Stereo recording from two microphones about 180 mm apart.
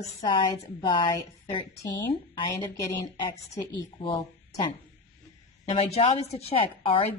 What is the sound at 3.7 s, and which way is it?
Speech, 25° left (ahead or behind).